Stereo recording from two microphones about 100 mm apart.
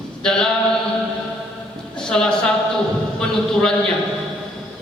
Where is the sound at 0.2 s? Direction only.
5° left (ahead or behind).